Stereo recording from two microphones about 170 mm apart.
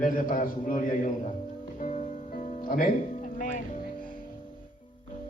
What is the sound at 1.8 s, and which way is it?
Music, 45° left (ahead or behind).